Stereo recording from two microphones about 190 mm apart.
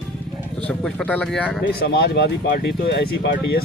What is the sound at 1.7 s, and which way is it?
Speech, 55° left (ahead or behind).